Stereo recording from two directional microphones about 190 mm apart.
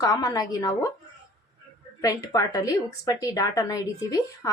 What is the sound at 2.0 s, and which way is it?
A woman's voice, 20° left (ahead or behind).